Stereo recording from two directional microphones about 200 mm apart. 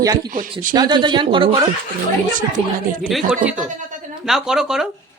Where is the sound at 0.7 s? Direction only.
20° right (ahead or behind).